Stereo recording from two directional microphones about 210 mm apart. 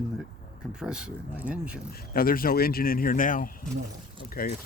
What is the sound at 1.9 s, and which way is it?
Speech, 45° left (ahead or behind).